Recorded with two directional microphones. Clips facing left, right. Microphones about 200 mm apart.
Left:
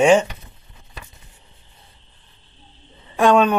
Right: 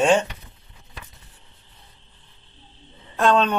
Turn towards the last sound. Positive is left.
turn(degrees=10)  # may be behind; listen again after turning